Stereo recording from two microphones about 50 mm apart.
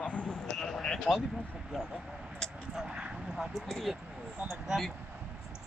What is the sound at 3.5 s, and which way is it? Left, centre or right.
Speech, centre.